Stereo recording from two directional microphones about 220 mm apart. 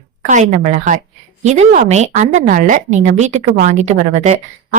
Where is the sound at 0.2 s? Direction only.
35° right (ahead or behind).